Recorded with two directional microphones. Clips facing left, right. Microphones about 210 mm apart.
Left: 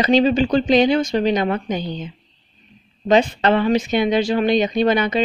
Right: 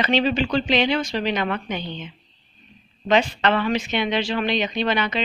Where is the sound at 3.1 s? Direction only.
35° left (ahead or behind).